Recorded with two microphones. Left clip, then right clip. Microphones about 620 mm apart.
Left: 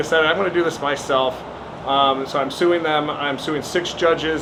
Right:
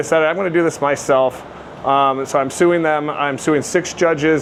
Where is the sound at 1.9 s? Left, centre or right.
Right.